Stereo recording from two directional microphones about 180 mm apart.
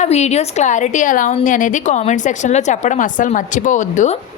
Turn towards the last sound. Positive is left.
turn(degrees=45)  # may be behind; listen again after turning